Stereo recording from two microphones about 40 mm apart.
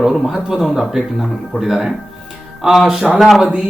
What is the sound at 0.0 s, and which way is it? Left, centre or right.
Speech, centre.